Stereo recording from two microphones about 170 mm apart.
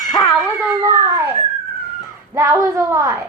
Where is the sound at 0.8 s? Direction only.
20° right (ahead or behind).